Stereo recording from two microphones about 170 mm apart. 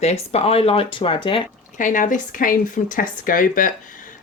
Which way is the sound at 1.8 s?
50° left (ahead or behind).